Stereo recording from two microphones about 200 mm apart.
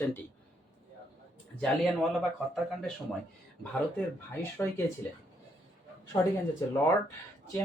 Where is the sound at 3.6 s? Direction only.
5° left (ahead or behind).